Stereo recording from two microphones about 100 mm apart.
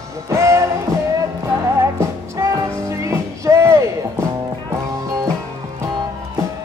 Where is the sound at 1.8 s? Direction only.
30° right (ahead or behind).